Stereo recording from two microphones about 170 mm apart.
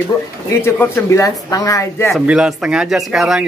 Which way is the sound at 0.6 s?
15° left (ahead or behind).